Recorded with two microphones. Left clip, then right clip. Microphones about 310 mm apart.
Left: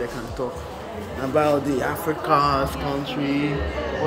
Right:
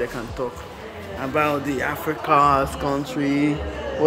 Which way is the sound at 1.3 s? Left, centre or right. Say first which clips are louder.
Left 2 dB; centre.